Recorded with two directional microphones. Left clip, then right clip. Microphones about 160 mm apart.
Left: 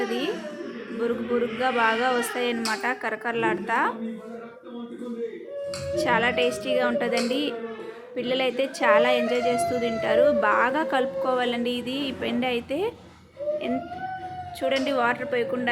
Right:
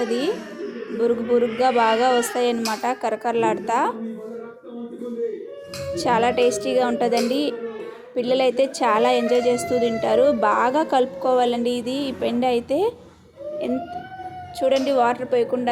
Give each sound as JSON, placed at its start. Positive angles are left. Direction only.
{"t": 0.9, "sound": "a woman's voice", "side_deg": -20}
{"t": 6.0, "sound": "a woman's voice", "side_deg": -20}
{"t": 14.6, "sound": "a woman's voice", "side_deg": -20}